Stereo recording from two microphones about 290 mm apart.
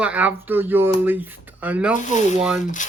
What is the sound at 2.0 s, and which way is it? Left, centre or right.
Speech, left.